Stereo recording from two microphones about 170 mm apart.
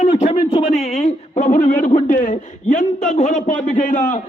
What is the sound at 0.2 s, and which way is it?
A man's voice, 35° left (ahead or behind).